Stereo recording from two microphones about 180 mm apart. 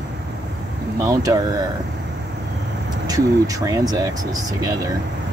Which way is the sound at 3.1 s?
20° right (ahead or behind).